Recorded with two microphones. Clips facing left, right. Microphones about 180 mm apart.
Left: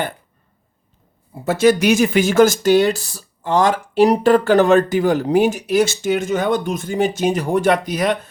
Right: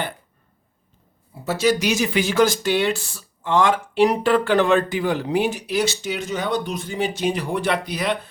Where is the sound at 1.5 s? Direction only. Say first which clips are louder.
Left 6 dB; 50° left (ahead or behind).